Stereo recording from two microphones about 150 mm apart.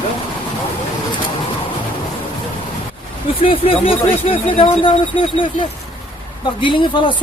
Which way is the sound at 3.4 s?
35° left (ahead or behind).